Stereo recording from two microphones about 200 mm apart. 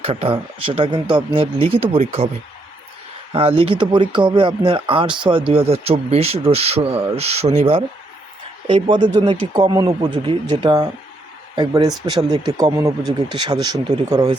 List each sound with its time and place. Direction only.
0.0 s speech: 30° right (ahead or behind)
3.3 s speech: 25° right (ahead or behind)